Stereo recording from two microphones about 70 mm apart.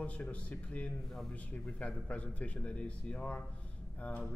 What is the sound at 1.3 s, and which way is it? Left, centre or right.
Speech, left.